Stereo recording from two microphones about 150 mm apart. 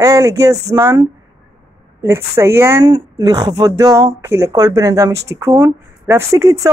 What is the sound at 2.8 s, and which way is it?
Speech, 25° right (ahead or behind).